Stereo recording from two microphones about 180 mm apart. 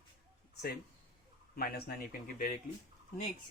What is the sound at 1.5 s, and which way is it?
Speech, 60° left (ahead or behind).